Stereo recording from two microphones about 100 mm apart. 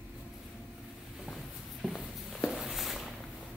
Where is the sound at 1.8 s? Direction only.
Centre (ahead or behind).